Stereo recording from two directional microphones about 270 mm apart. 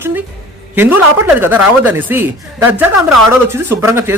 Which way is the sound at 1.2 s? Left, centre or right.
Centre.